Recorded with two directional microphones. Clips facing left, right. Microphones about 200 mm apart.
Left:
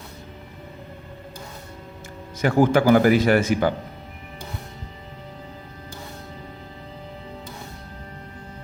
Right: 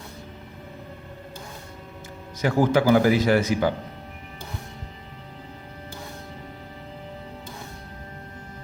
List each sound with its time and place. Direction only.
2.4 s speech: 50° left (ahead or behind)